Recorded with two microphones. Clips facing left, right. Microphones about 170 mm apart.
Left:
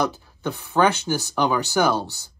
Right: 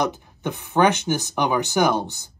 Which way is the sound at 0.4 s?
15° right (ahead or behind).